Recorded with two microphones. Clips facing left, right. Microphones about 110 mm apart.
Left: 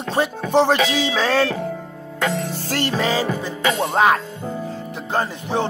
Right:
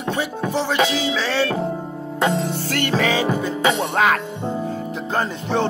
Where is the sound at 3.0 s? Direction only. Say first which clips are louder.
Right 2 dB; 35° left (ahead or behind).